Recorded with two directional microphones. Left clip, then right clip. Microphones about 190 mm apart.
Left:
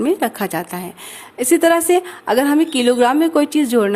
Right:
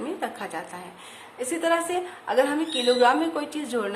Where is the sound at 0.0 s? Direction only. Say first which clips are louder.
Left 12 dB; 50° left (ahead or behind).